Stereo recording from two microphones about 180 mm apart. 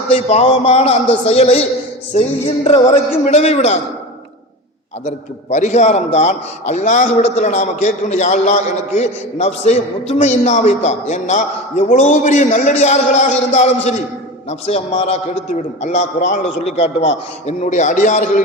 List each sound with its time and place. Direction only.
0.1 s a man's voice: 35° left (ahead or behind)
2.6 s a man's voice: 35° left (ahead or behind)
5.0 s a man's voice: 40° left (ahead or behind)